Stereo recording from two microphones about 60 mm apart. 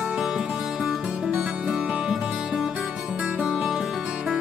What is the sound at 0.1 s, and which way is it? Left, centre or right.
Music, centre.